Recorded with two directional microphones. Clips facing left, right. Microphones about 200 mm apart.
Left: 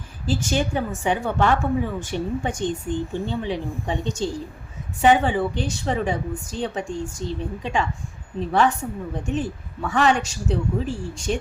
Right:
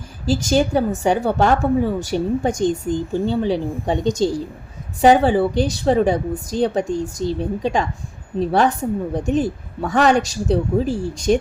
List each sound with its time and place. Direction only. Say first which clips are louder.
0.3 s speech: right 6 dB; 40° right (ahead or behind)